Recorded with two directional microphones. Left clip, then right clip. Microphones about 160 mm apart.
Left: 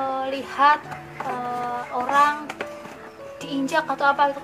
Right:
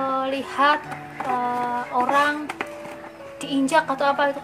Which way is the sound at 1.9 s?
20° right (ahead or behind).